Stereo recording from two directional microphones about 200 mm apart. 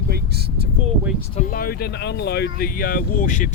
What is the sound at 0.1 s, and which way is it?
Vehicle, 50° right (ahead or behind).